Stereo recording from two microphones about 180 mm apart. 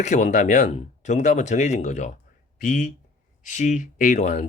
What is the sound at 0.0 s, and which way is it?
Speech, 40° left (ahead or behind).